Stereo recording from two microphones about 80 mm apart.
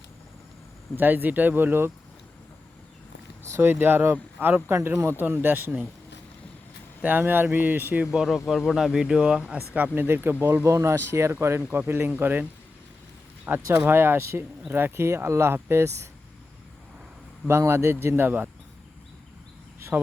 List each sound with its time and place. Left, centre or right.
0.9 s speech: right
3.5 s speech: right
7.0 s speech: right
8.1 s speech: centre
9.5 s speech: right
13.7 s speech: right
17.5 s speech: right
19.9 s speech: right